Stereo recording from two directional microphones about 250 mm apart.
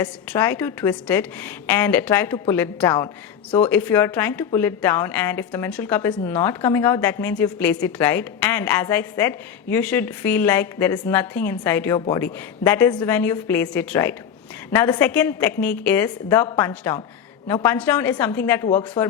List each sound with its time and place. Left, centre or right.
0.0 s a woman's voice: centre
11.9 s speech: centre
12.2 s a woman's voice: centre